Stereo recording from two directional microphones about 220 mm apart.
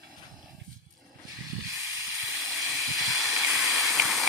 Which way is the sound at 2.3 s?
Centre (ahead or behind).